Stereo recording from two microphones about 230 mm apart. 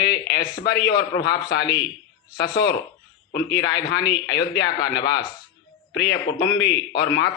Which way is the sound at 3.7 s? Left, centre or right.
Left.